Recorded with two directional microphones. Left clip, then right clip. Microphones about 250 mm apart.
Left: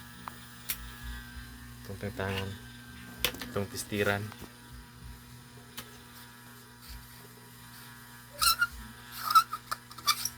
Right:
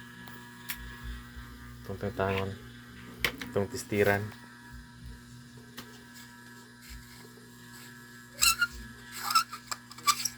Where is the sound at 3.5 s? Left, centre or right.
Centre.